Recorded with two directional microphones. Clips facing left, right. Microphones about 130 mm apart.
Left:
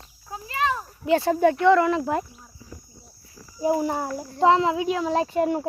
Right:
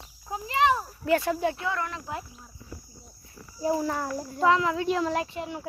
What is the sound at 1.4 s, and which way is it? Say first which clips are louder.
Speech: left 9 dB; 55° left (ahead or behind).